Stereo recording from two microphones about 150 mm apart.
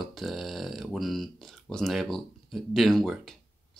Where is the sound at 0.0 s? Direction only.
Centre (ahead or behind).